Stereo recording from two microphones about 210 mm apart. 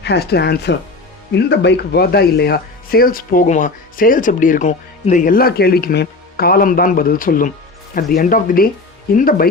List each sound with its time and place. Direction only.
0.0 s speech: 50° left (ahead or behind)